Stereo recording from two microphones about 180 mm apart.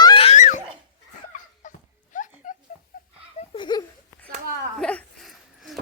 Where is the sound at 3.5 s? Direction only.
25° left (ahead or behind).